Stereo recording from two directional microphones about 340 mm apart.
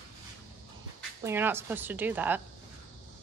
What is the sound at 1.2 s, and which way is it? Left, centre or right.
Speech, centre.